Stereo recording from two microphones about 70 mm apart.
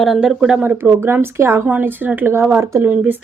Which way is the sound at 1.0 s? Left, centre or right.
Right.